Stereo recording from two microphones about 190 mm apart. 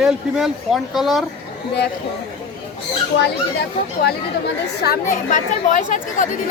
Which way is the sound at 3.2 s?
60° left (ahead or behind).